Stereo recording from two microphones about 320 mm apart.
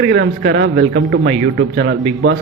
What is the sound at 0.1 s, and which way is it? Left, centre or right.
Speech, right.